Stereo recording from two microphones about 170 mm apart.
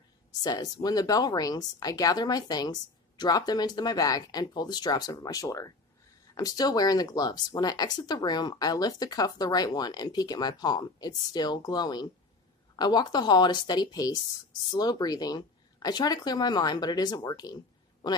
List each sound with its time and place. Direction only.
0.3 s speech: 20° left (ahead or behind)